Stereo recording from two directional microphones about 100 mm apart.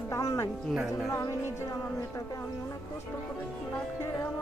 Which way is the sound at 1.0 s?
30° left (ahead or behind).